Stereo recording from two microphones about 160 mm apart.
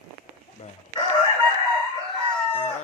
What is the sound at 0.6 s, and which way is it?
Chicken, 45° left (ahead or behind).